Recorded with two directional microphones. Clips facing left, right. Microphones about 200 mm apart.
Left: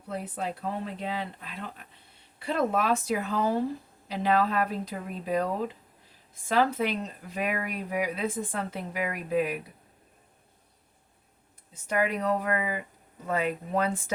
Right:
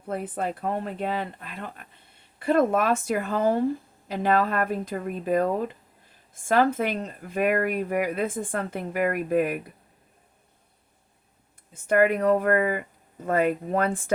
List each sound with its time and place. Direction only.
0.1 s speech: 50° right (ahead or behind)
11.7 s speech: 55° right (ahead or behind)